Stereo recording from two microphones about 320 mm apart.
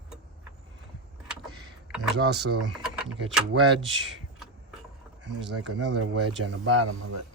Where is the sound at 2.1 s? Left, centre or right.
Right.